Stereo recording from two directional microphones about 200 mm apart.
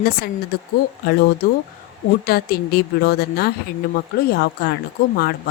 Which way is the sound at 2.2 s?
50° left (ahead or behind).